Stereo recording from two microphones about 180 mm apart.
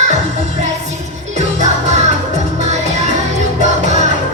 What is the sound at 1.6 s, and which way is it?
Music, 40° right (ahead or behind).